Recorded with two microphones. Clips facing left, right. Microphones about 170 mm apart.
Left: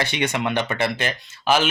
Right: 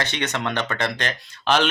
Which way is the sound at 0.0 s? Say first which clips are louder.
Left 3 dB; 10° left (ahead or behind).